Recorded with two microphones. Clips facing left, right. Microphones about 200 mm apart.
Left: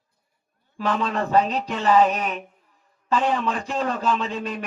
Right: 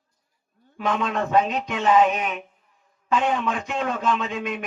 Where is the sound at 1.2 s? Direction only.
35° left (ahead or behind).